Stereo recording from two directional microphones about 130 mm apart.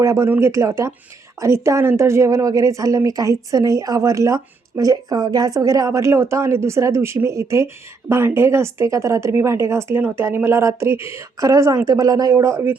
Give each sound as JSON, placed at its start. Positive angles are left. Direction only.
{"t": 0.0, "sound": "speech", "side_deg": -25}